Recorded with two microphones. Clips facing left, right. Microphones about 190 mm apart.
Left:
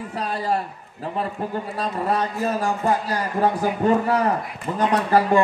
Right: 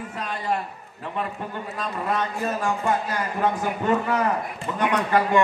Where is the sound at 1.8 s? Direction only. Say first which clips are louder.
Left 3 dB; 35° left (ahead or behind).